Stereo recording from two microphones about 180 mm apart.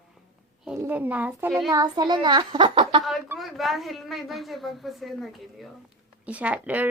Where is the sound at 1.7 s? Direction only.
20° right (ahead or behind).